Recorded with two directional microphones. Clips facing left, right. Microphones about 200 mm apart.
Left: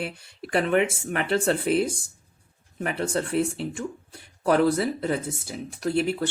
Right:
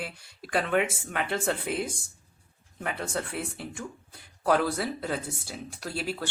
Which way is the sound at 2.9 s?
30° left (ahead or behind).